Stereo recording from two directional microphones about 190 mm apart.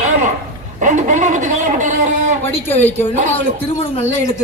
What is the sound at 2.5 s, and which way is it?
Speech, 10° left (ahead or behind).